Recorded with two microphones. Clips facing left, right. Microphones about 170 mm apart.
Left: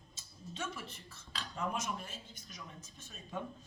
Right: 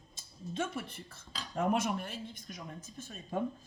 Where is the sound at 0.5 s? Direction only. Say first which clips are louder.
Right 7 dB; 55° right (ahead or behind).